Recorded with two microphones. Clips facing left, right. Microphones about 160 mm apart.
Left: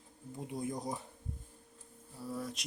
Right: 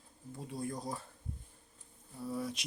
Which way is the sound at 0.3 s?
20° left (ahead or behind).